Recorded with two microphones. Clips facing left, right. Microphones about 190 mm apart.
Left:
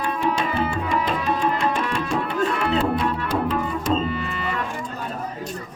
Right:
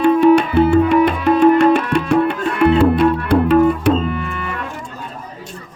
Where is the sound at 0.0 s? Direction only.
65° right (ahead or behind).